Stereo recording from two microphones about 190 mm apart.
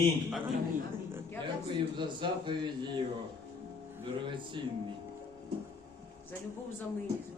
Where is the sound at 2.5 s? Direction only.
25° right (ahead or behind).